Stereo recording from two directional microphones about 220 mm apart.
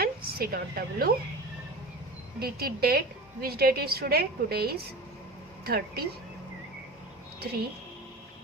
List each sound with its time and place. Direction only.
0.0 s a woman's voice: 45° right (ahead or behind)
2.4 s a woman's voice: 45° right (ahead or behind)